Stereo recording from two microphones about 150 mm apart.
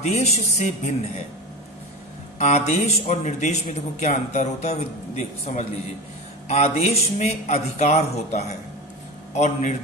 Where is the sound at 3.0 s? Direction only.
50° left (ahead or behind).